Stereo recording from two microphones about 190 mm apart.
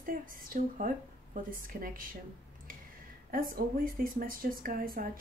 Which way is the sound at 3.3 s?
50° right (ahead or behind).